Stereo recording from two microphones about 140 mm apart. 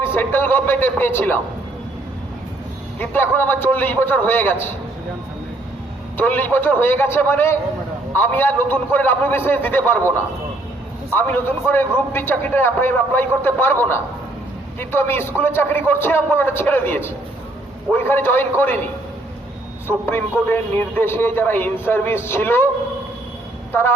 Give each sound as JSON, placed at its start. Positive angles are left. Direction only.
{"t": 0.0, "sound": "a man's voice", "side_deg": 15}
{"t": 3.0, "sound": "a man's voice", "side_deg": 15}
{"t": 6.1, "sound": "a man's voice", "side_deg": 15}
{"t": 11.1, "sound": "a man's voice", "side_deg": 15}
{"t": 20.1, "sound": "a man's voice", "side_deg": 15}